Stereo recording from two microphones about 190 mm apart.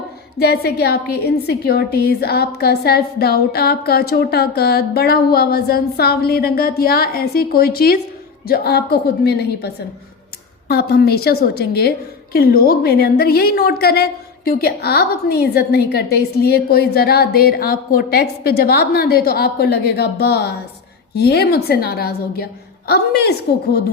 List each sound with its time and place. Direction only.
0.3 s a woman's voice: 55° left (ahead or behind)